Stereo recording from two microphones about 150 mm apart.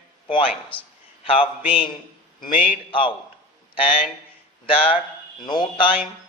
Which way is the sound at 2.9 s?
35° left (ahead or behind).